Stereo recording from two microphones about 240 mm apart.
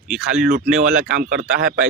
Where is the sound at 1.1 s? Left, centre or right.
Right.